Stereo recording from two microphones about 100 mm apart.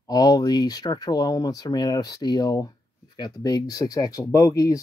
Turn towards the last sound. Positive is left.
turn(degrees=35)  # may be behind; listen again after turning